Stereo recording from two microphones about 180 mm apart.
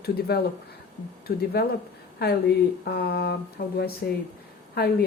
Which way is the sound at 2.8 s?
60° left (ahead or behind).